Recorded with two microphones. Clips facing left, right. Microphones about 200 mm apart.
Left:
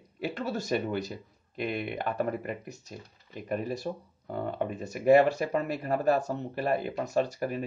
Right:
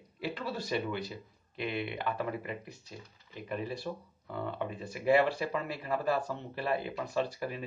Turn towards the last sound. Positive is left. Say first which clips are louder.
# left 5 dB
turn(degrees=45)  # may be behind; listen again after turning